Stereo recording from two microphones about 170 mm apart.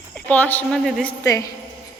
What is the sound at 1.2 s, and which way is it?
Speech, 20° left (ahead or behind).